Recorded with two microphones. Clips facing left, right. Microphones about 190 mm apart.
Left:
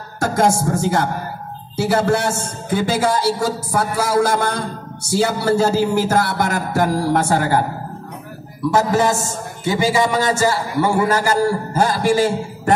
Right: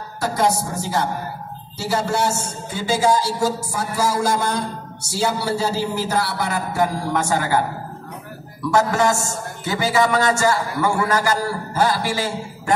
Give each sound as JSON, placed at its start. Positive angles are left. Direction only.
{"t": 0.2, "sound": "music", "side_deg": 50}
{"t": 0.6, "sound": "a man's voice", "side_deg": 50}
{"t": 8.6, "sound": "a man's voice", "side_deg": 20}
{"t": 11.1, "sound": "speech", "side_deg": 40}